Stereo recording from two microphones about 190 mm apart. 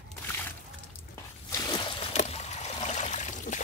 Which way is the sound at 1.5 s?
20° left (ahead or behind).